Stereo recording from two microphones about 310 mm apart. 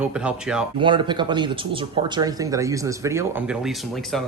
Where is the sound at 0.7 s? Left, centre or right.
Centre.